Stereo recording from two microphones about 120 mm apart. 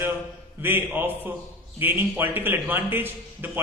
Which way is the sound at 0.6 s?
15° right (ahead or behind).